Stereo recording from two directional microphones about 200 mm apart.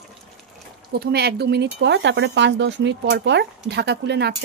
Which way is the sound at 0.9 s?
55° right (ahead or behind).